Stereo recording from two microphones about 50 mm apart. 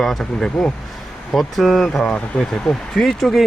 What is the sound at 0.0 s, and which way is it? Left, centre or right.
Speech, centre.